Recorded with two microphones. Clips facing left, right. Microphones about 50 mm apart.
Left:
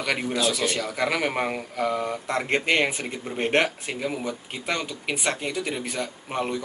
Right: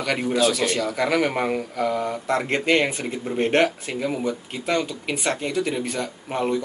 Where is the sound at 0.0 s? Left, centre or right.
Centre.